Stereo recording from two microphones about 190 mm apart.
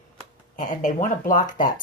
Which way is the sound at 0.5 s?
40° left (ahead or behind).